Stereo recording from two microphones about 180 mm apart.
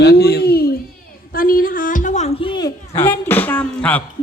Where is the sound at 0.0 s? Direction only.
60° left (ahead or behind).